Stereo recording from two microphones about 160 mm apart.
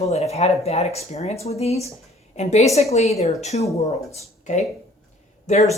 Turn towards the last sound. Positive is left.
turn(degrees=45)  # may be behind; listen again after turning